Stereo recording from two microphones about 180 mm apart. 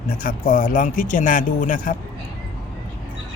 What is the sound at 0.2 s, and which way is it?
Speech, 50° left (ahead or behind).